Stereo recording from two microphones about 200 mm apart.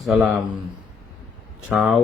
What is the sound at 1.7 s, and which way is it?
Speech, centre (ahead or behind).